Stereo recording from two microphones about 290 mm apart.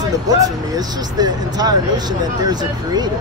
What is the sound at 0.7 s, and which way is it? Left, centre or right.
Speech, centre.